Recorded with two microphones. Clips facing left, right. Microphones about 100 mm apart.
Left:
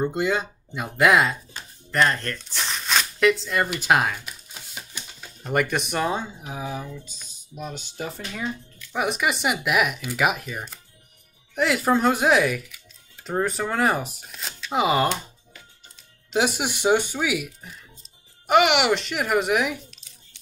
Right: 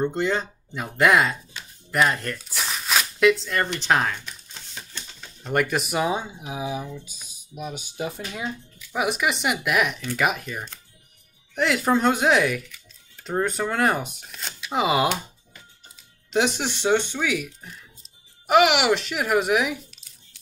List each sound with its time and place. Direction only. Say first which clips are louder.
0.0 s speech: even; 5° left (ahead or behind)
16.3 s speech: even; 5° left (ahead or behind)